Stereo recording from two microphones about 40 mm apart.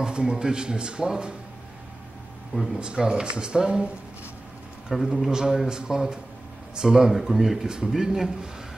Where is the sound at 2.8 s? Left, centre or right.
Right.